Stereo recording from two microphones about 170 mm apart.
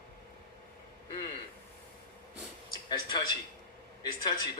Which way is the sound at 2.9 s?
25° left (ahead or behind).